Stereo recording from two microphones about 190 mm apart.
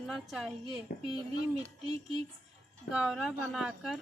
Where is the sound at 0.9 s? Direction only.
55° left (ahead or behind).